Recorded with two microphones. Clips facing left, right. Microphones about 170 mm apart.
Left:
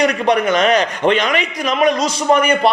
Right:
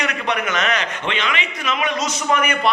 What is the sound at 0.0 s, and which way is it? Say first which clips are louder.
A man's voice: left 8 dB; 35° left (ahead or behind).